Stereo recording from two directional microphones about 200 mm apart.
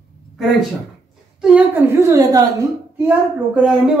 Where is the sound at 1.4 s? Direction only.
5° right (ahead or behind).